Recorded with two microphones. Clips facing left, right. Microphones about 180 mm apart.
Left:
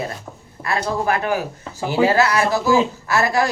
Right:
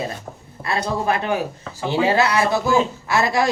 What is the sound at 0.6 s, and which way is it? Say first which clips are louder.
Speech: left 1 dB; 25° right (ahead or behind).